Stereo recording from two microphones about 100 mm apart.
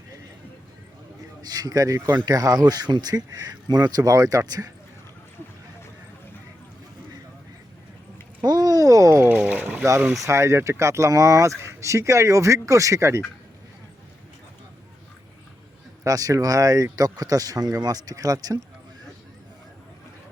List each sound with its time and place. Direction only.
1.4 s speech: 40° right (ahead or behind)
8.4 s a sound: 40° right (ahead or behind)
9.4 s boat: 15° right (ahead or behind)
10.2 s speech: 30° right (ahead or behind)
16.0 s speech: 35° right (ahead or behind)